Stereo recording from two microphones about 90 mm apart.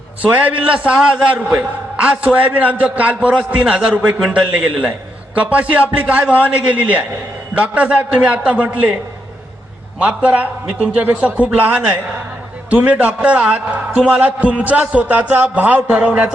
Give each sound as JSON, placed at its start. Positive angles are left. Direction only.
{"t": 0.3, "sound": "a man's voice", "side_deg": -15}
{"t": 10.0, "sound": "a man's voice", "side_deg": -15}